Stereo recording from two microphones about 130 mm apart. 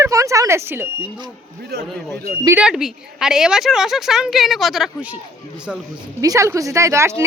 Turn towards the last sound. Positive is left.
turn(degrees=-20)  # may be behind; listen again after turning